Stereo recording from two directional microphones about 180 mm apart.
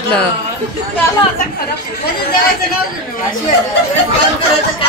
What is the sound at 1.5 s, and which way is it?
Speech, 60° left (ahead or behind).